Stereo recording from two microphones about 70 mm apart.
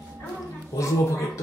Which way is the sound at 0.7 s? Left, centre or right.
Left.